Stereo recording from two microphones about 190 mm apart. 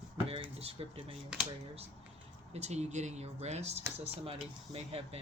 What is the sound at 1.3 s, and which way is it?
Speech, 5° right (ahead or behind).